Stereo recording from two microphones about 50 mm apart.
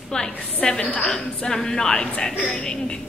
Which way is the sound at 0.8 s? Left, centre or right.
Left.